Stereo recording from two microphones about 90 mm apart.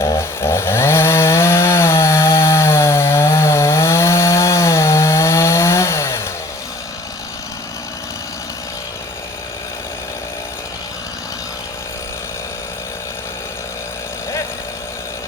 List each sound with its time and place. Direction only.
0.0 s chainsaw: 30° left (ahead or behind)